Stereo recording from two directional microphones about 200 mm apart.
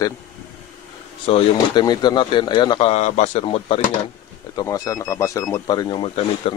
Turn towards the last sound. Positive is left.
turn(degrees=25)  # may be behind; listen again after turning